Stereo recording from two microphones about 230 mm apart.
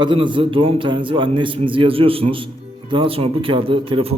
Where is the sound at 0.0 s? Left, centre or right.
Right.